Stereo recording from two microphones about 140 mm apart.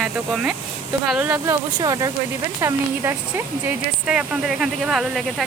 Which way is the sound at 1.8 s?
25° right (ahead or behind).